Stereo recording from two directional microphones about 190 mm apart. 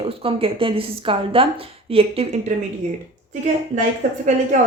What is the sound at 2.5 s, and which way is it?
Speech, 40° right (ahead or behind).